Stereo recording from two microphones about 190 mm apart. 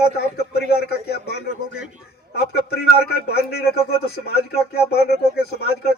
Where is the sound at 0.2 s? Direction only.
55° left (ahead or behind).